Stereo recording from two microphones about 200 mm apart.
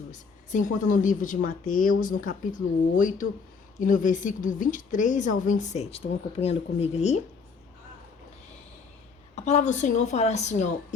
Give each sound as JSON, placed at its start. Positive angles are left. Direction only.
{"t": 0.1, "sound": "a woman's voice", "side_deg": 40}
{"t": 9.3, "sound": "a woman's voice", "side_deg": 35}